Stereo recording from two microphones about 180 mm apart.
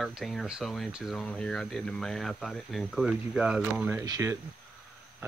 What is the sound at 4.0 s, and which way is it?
Speech, 15° right (ahead or behind).